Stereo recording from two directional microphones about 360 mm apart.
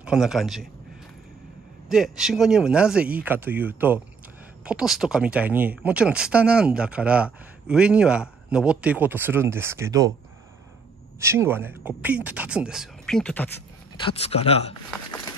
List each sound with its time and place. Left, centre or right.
0.0 s speech: centre
1.9 s speech: centre
11.1 s speech: centre
13.9 s speech: centre